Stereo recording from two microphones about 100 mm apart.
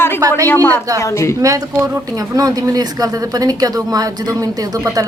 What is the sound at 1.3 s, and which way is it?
Speech, 35° right (ahead or behind).